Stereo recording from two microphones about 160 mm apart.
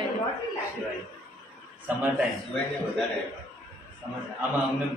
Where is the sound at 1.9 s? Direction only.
10° right (ahead or behind).